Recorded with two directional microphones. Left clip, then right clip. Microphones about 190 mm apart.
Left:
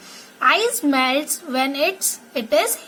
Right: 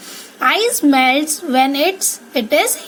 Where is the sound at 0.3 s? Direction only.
25° right (ahead or behind).